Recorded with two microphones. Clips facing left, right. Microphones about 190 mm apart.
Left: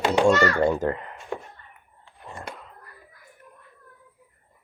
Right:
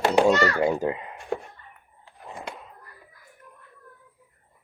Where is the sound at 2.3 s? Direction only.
5° right (ahead or behind).